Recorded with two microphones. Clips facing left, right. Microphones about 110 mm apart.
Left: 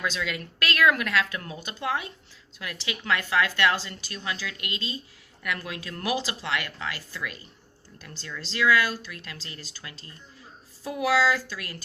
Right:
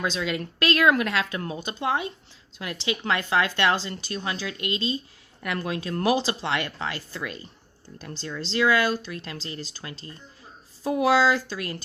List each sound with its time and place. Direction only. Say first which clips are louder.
0.0 s speech: right 3 dB; 30° right (ahead or behind)